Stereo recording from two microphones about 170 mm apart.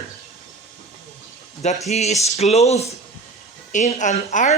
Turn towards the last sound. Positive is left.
turn(degrees=45)  # may be behind; listen again after turning